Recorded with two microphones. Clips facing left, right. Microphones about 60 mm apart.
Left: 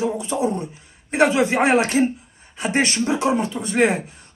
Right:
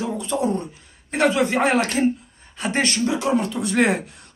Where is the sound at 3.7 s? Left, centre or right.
Centre.